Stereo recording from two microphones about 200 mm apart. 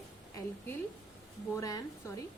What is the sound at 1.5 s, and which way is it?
Speech, 15° left (ahead or behind).